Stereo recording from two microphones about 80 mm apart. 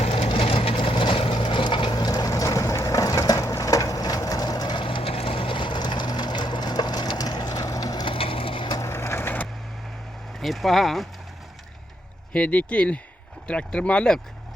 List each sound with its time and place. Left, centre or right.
0.2 s vehicle: left
8.0 s crushing: left
8.8 s crushing: left
10.4 s speech: centre
12.3 s speech: centre